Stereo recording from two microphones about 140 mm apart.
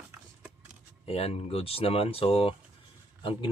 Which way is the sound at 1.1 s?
45° left (ahead or behind).